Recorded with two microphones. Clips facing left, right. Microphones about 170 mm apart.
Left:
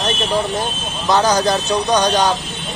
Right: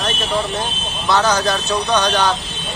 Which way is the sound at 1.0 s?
15° left (ahead or behind).